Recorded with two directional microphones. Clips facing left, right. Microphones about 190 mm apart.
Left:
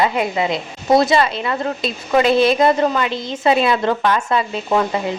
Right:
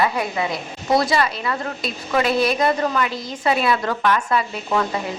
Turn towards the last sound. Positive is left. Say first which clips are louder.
# left 3 dB
turn(degrees=25)  # may be behind; listen again after turning